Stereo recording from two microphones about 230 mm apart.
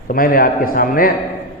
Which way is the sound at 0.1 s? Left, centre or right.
Left.